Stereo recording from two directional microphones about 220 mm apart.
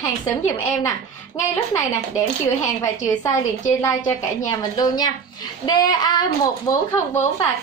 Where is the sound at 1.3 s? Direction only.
15° left (ahead or behind).